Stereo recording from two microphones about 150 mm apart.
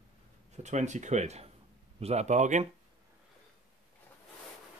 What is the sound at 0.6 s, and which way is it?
Speech, 50° right (ahead or behind).